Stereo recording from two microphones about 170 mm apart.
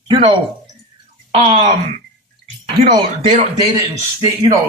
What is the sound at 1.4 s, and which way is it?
Speech, 35° right (ahead or behind).